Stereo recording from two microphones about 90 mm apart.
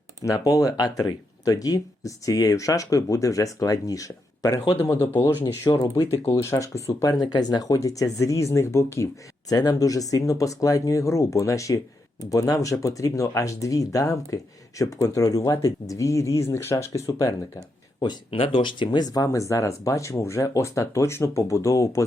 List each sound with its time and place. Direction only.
0.2 s speech: 45° left (ahead or behind)
4.8 s speech: 25° left (ahead or behind)
7.2 s speech: 50° left (ahead or behind); by 9.0 s 30° left (ahead or behind)
9.5 s speech: 45° left (ahead or behind)
18.3 s speech: 90° left; by 22.0 s 35° left (ahead or behind)